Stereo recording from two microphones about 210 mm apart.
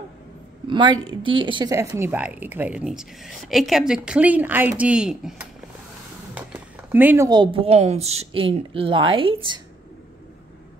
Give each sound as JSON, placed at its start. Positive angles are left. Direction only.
{"t": 0.7, "sound": "speech", "side_deg": -20}
{"t": 6.3, "sound": "speech", "side_deg": -10}